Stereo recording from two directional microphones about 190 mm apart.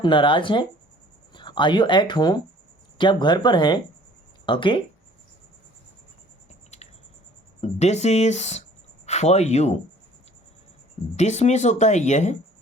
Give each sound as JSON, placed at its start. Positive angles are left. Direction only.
{"t": 0.0, "sound": "speech", "side_deg": 25}
{"t": 7.6, "sound": "speech", "side_deg": 35}
{"t": 11.2, "sound": "speech", "side_deg": 35}